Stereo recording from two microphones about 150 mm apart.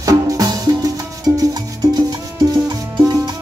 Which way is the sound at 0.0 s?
25° right (ahead or behind).